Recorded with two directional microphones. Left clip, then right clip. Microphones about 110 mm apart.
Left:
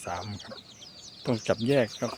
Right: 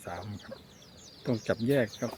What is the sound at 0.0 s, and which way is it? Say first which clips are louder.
Speech: left 5 dB; 10° left (ahead or behind).